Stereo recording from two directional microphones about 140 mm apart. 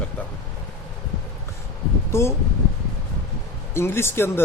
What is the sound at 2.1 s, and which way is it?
Speech, 20° left (ahead or behind).